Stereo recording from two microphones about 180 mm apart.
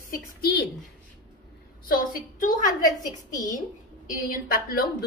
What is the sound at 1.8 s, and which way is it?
Speech, 55° left (ahead or behind).